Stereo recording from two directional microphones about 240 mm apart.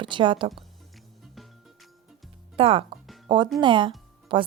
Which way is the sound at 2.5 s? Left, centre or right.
Right.